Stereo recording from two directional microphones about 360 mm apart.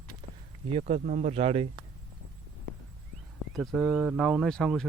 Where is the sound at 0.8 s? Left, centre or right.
Centre.